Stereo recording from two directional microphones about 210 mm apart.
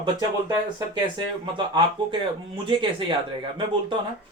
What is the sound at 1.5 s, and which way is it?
Speech, 25° right (ahead or behind).